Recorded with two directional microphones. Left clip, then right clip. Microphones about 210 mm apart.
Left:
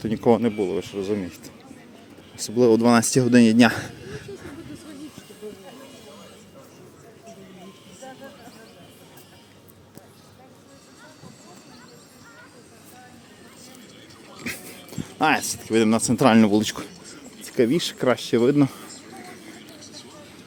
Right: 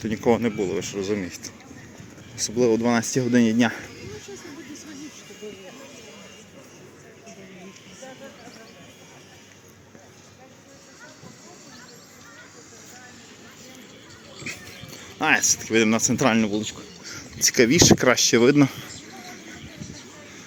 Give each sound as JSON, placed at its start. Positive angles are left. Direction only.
{"t": 0.0, "sound": "speech", "side_deg": 15}
{"t": 2.6, "sound": "speech", "side_deg": 25}
{"t": 14.4, "sound": "clip-clop", "side_deg": 30}
{"t": 15.2, "sound": "speech", "side_deg": 15}
{"t": 17.4, "sound": "speech", "side_deg": -5}